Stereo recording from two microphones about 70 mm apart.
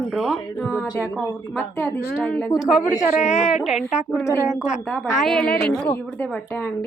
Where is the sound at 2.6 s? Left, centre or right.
Centre.